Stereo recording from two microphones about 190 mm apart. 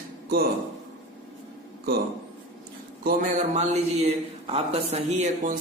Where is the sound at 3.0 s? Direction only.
40° right (ahead or behind).